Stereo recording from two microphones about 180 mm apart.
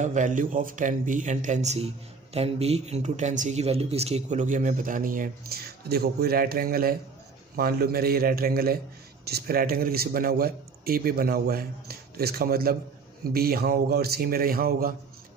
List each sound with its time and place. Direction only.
0.0 s a man's voice: 45° right (ahead or behind)